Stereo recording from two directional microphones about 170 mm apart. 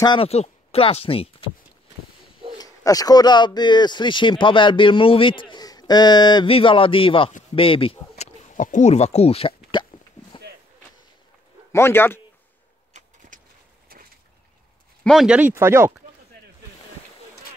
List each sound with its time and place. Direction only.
0.0 s speech: 30° left (ahead or behind)
2.6 s speech: 20° left (ahead or behind)
8.5 s speech: 45° left (ahead or behind)
11.7 s a man's voice: 15° left (ahead or behind)
13.3 s a sound: 50° right (ahead or behind)
15.0 s speech: 5° right (ahead or behind)